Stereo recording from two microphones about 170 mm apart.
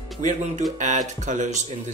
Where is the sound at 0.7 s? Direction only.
45° right (ahead or behind).